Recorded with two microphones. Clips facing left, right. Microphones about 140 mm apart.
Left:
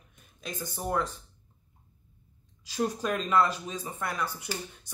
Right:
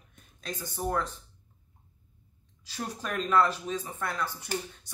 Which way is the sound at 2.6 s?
15° left (ahead or behind).